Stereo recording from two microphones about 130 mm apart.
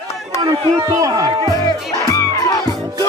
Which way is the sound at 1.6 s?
25° left (ahead or behind).